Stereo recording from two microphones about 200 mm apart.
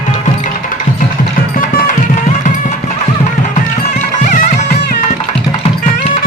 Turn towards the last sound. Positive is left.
turn(degrees=40)  # may be behind; listen again after turning